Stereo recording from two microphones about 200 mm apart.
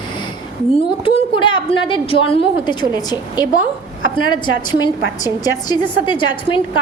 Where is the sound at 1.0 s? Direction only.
25° left (ahead or behind).